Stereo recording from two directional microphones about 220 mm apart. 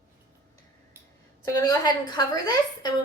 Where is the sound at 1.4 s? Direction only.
15° left (ahead or behind).